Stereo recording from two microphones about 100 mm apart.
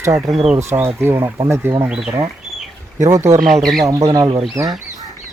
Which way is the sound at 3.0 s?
35° right (ahead or behind).